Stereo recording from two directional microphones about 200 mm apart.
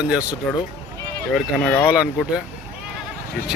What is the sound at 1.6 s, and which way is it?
Speech, 10° left (ahead or behind).